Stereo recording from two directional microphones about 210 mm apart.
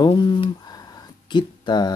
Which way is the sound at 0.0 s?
20° left (ahead or behind).